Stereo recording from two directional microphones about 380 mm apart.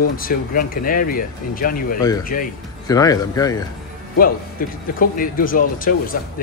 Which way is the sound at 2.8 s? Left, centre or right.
Centre.